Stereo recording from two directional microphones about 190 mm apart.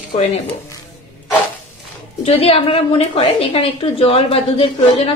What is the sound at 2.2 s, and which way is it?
A woman's voice, 30° left (ahead or behind).